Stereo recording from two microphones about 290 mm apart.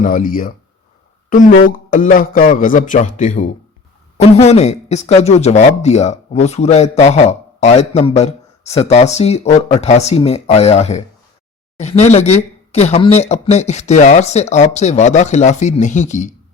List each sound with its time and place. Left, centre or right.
0.0 s speech: left